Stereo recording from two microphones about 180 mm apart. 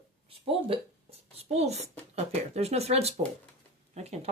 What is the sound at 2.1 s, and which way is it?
Speech, 35° right (ahead or behind).